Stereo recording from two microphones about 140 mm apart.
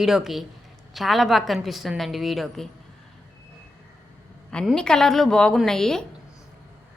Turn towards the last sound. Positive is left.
turn(degrees=5)  # may be behind; listen again after turning